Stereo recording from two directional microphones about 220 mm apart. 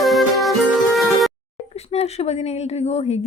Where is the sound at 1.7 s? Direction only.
30° left (ahead or behind).